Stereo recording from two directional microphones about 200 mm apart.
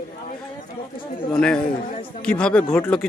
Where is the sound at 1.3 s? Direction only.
5° left (ahead or behind).